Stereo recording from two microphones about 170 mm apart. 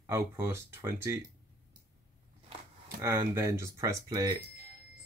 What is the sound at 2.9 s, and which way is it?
Speech, 20° right (ahead or behind).